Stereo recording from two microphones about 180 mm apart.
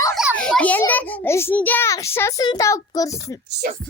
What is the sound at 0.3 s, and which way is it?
A child's voice, 5° left (ahead or behind).